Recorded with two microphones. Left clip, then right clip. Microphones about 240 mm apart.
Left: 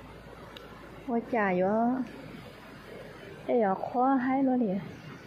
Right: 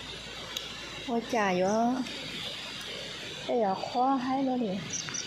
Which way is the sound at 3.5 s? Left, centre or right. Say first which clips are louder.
Left 2 dB; centre.